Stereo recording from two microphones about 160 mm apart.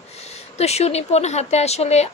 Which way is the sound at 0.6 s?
40° left (ahead or behind).